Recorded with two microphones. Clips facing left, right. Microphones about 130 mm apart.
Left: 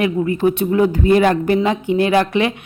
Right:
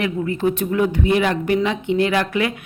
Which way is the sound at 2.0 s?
25° left (ahead or behind).